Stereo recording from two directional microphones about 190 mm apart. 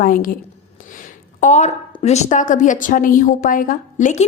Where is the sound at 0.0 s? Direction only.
45° left (ahead or behind).